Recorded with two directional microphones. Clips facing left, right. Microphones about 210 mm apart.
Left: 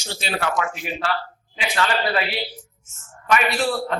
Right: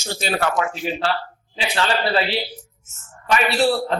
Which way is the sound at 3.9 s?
30° right (ahead or behind).